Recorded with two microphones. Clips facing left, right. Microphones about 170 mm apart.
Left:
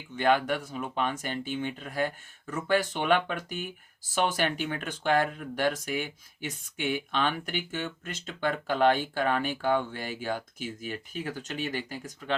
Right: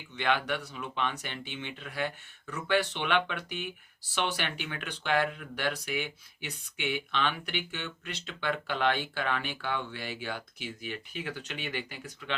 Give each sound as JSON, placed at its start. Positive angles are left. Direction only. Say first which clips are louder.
{"t": 0.2, "sound": "speech", "louder": "left 5 dB", "side_deg": 45}